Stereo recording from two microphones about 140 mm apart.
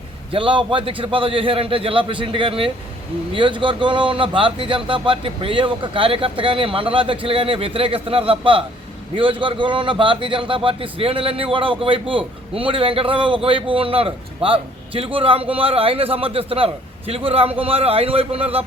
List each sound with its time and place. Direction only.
0.3 s a man's voice: 40° right (ahead or behind)